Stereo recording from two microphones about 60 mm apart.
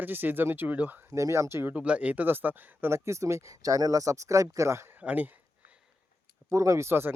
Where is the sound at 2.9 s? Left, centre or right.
Right.